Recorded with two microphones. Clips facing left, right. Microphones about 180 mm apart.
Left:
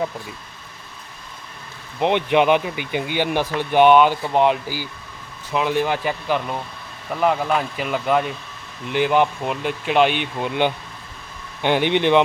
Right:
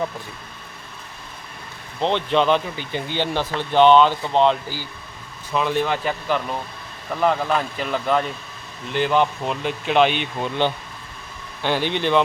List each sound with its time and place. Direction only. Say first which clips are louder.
2.0 s speech: left 2 dB; 15° left (ahead or behind)